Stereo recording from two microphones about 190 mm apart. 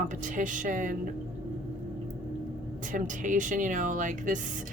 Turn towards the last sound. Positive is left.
turn(degrees=-40)  # may be behind; listen again after turning